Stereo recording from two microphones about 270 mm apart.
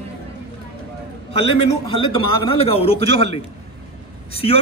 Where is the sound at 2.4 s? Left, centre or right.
Left.